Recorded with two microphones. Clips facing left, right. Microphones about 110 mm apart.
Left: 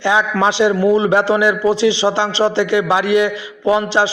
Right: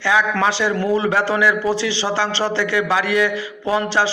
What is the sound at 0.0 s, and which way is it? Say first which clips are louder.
A man's voice: left 3 dB; 20° left (ahead or behind).